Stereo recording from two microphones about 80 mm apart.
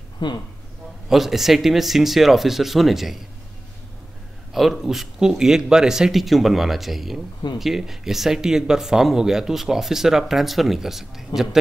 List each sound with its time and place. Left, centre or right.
0.2 s speech: left
1.0 s speech: centre
4.5 s speech: centre